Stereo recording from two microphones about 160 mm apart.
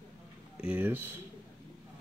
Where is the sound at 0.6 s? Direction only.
10° right (ahead or behind).